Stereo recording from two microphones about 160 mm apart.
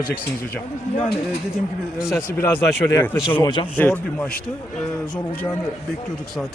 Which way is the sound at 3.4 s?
30° left (ahead or behind).